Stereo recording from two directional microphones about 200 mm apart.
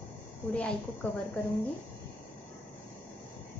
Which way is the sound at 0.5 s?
5° left (ahead or behind).